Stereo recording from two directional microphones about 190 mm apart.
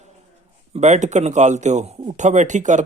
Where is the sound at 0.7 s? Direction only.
35° right (ahead or behind).